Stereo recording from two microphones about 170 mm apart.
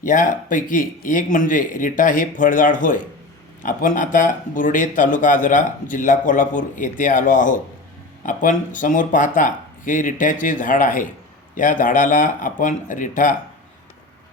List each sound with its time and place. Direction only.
0.0 s speech: 50° left (ahead or behind)